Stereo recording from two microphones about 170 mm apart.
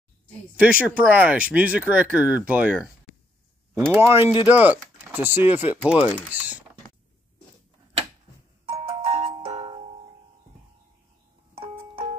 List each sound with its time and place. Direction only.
0.6 s speech: 10° right (ahead or behind)
4.1 s speech: 30° left (ahead or behind)
4.5 s speech: 10° right (ahead or behind)
8.8 s music: 35° right (ahead or behind)
11.5 s music: 30° right (ahead or behind)